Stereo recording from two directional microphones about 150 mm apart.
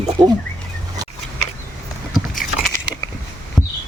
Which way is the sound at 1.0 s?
25° right (ahead or behind).